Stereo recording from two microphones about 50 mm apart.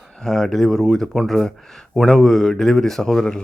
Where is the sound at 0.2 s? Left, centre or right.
Centre.